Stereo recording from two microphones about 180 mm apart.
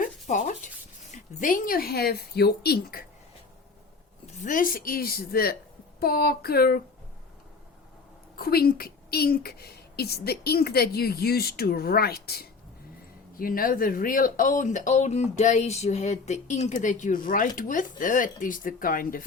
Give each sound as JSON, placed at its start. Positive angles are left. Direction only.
{"t": 0.0, "sound": "sanding", "side_deg": 45}
{"t": 1.1, "sound": "a woman's voice", "side_deg": 45}
{"t": 4.4, "sound": "a woman's voice", "side_deg": 45}
{"t": 8.4, "sound": "a woman's voice", "side_deg": 55}